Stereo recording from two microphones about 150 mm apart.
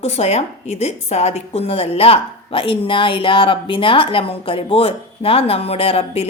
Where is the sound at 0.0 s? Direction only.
45° left (ahead or behind).